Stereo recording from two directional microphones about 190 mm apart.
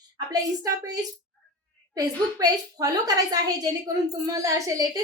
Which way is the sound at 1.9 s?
20° right (ahead or behind).